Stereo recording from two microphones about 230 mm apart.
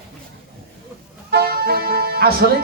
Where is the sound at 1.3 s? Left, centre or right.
Right.